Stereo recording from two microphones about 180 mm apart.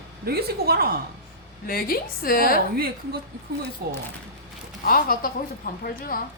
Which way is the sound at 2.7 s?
60° right (ahead or behind).